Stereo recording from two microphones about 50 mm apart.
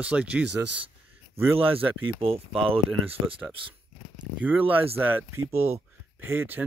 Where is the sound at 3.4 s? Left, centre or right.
Right.